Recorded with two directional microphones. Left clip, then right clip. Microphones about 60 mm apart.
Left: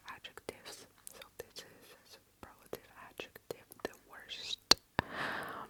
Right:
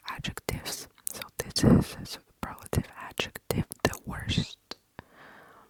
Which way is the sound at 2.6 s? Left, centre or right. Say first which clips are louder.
Right 10 dB; right.